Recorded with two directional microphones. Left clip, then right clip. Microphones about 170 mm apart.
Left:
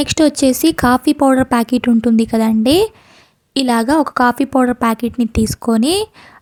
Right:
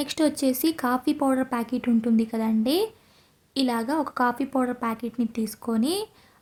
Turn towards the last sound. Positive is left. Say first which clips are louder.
# left 12 dB
turn(degrees=45)  # may be behind; listen again after turning